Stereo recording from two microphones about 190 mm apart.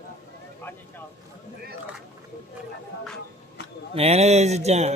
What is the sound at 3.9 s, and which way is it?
Speech, 30° right (ahead or behind).